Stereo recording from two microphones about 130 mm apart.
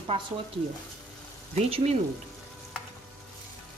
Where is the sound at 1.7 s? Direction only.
55° right (ahead or behind).